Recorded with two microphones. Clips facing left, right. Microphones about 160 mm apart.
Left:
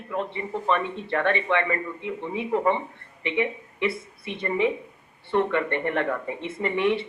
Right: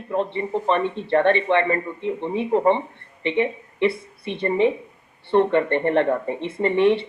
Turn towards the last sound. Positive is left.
turn(degrees=-30)  # may be behind; listen again after turning